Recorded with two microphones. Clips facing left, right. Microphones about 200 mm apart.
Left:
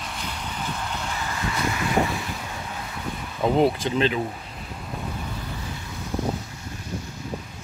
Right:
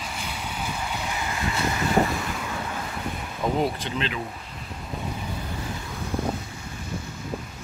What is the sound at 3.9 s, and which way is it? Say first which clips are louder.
Speech: left 7 dB; 35° left (ahead or behind).